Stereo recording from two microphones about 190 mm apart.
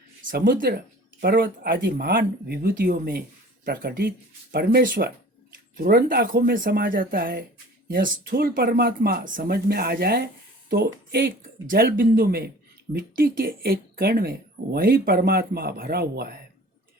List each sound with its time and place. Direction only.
0.3 s speech: 50° right (ahead or behind)